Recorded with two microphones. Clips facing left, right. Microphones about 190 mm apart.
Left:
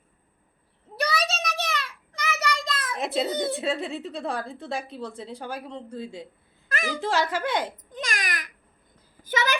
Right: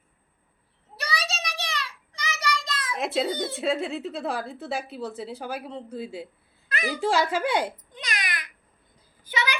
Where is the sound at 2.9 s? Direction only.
Centre (ahead or behind).